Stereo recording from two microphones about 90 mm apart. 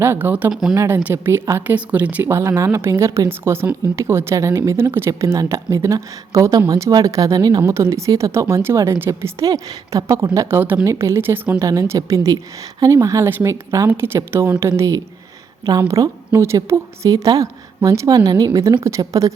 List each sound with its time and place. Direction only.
0.0 s speech: 25° right (ahead or behind)
2.2 s speech: 30° right (ahead or behind); by 7.6 s 45° right (ahead or behind)
7.6 s speech: 30° right (ahead or behind)
14.8 s speech: 35° right (ahead or behind)